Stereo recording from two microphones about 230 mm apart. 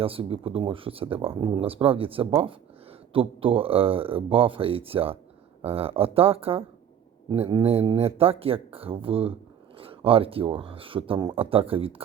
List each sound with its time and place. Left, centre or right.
0.0 s speech: right